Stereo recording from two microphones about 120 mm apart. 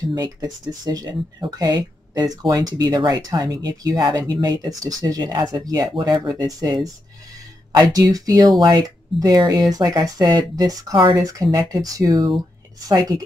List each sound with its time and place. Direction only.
0.1 s speech: 35° right (ahead or behind)
7.9 s speech: 30° right (ahead or behind)